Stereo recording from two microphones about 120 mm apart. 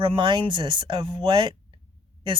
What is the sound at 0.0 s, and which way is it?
Speech, 45° right (ahead or behind).